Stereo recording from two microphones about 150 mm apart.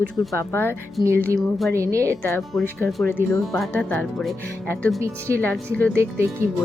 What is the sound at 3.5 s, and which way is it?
Speech, centre (ahead or behind).